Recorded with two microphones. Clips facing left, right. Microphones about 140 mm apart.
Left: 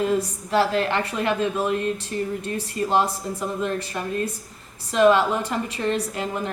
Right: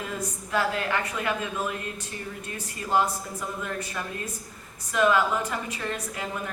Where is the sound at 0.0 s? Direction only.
30° left (ahead or behind).